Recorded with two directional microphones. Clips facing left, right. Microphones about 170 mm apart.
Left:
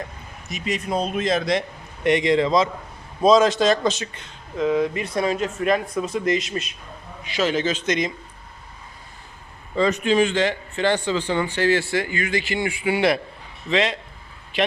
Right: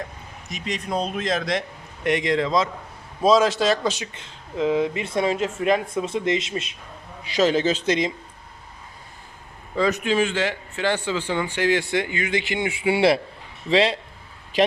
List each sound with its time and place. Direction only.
0.5 s a man's voice: 5° left (ahead or behind); by 4.1 s 10° right (ahead or behind)
4.1 s speech: 25° right (ahead or behind)
7.3 s a man's voice: 35° right (ahead or behind)
9.7 s a man's voice: 5° right (ahead or behind); by 14.0 s 30° right (ahead or behind)